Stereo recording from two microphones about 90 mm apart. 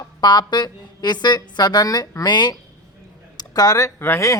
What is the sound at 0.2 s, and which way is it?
A woman's voice, 55° left (ahead or behind).